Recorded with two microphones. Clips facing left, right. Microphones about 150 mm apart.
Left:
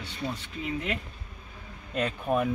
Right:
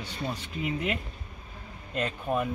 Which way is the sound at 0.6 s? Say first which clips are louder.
Right 2 dB; 5° right (ahead or behind).